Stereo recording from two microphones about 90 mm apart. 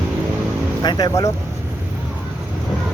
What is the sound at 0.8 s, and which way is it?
Speech, 50° left (ahead or behind).